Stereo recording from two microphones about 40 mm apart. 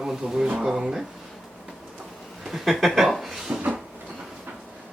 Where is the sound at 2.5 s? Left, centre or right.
Centre.